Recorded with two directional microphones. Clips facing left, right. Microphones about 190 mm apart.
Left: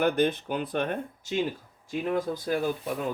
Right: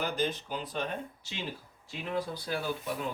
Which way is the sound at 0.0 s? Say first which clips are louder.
Left 8 dB; 60° left (ahead or behind).